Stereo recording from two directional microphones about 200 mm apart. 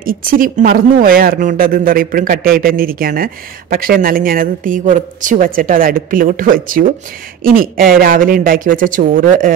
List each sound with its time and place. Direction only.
0.0 s a woman's voice: 45° right (ahead or behind)